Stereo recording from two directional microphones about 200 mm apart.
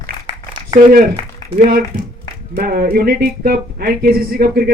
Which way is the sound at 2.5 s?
50° right (ahead or behind).